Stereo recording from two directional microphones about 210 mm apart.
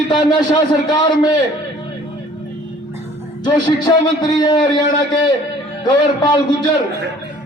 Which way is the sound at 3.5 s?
20° left (ahead or behind).